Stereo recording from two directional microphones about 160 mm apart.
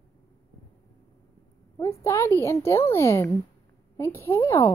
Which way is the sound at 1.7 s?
20° left (ahead or behind).